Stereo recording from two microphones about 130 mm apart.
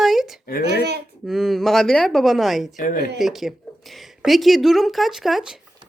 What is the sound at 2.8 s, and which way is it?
Speech, 90° left.